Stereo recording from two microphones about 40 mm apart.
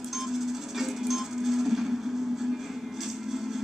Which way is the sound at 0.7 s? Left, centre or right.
Centre.